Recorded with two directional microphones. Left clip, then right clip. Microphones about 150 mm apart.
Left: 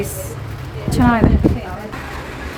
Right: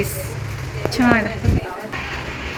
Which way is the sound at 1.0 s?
20° left (ahead or behind).